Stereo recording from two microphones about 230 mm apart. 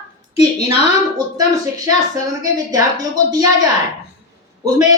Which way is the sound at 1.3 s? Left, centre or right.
Centre.